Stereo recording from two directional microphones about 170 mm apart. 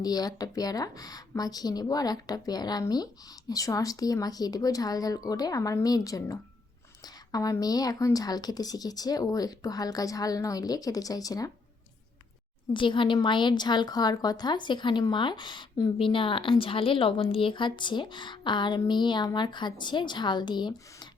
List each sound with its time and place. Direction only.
0.0 s a woman's voice: 20° left (ahead or behind)
12.7 s a woman's voice: 30° left (ahead or behind)